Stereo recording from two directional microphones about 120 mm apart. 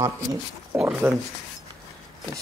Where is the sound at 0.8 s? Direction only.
10° right (ahead or behind).